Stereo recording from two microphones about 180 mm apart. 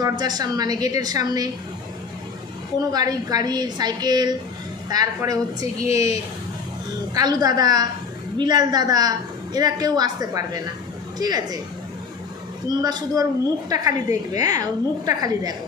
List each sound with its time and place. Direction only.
0.0 s a woman's voice: 20° right (ahead or behind)
2.9 s a woman's voice: 20° right (ahead or behind)
7.2 s a woman's voice: 20° right (ahead or behind)
12.8 s a woman's voice: 20° right (ahead or behind)